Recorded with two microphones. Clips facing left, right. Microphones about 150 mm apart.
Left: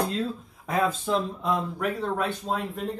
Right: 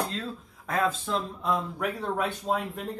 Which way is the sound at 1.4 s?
5° right (ahead or behind).